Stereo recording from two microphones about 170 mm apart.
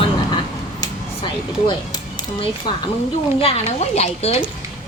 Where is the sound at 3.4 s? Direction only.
40° left (ahead or behind).